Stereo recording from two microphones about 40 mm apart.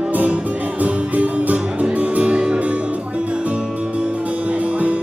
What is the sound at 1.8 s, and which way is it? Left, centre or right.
Music, right.